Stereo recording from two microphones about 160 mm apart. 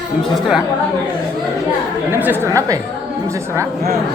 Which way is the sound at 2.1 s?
15° right (ahead or behind).